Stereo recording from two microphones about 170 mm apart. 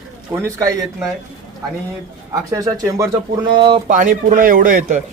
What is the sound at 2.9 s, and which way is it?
Speech, 20° right (ahead or behind).